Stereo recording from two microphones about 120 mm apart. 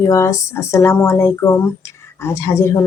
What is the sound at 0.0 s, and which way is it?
Speech, 25° left (ahead or behind).